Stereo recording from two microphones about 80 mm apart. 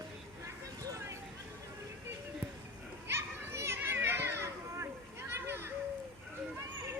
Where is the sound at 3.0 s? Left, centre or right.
Right.